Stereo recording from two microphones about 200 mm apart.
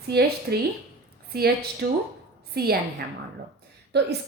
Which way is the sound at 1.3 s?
50° right (ahead or behind).